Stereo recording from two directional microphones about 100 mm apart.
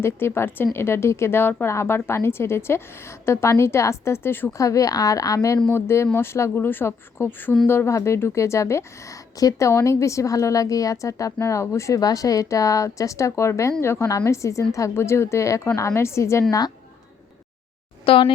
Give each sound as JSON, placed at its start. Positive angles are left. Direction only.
{"t": 0.0, "sound": "speech", "side_deg": 25}
{"t": 4.6, "sound": "a woman's voice", "side_deg": 35}
{"t": 18.0, "sound": "speech", "side_deg": 65}